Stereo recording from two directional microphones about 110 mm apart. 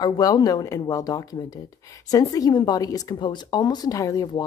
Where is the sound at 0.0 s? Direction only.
35° left (ahead or behind).